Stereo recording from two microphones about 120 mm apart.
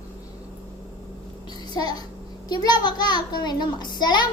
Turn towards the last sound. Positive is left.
turn(degrees=35)  # may be behind; listen again after turning